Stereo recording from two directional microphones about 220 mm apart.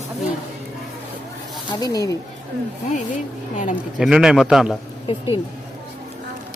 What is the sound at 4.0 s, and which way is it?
Speech, 5° right (ahead or behind).